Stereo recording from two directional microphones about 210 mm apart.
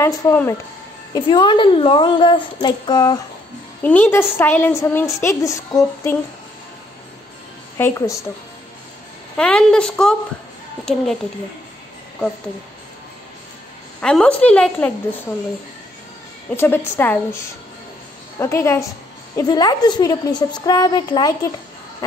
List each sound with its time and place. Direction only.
0.0 s a woman's voice: 15° left (ahead or behind)
1.1 s a woman's voice: 20° left (ahead or behind)
3.8 s a woman's voice: 10° left (ahead or behind)
7.7 s a woman's voice: 15° left (ahead or behind)
9.4 s a woman's voice: 5° left (ahead or behind)
14.0 s a woman's voice: 5° left (ahead or behind)
16.4 s a woman's voice: 10° left (ahead or behind)